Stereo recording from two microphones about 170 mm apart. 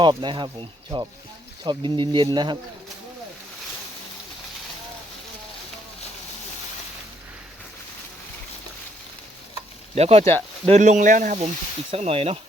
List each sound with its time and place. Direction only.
0.0 s speech: 25° right (ahead or behind)
9.9 s speech: 35° right (ahead or behind)
11.9 s speech: 35° right (ahead or behind)